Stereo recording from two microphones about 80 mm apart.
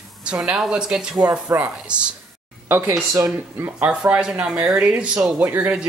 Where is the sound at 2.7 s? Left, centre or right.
Right.